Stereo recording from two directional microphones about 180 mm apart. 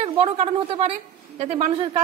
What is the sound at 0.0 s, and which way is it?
Speech, 35° right (ahead or behind).